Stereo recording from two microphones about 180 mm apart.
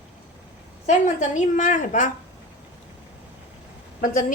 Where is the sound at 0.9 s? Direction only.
45° left (ahead or behind).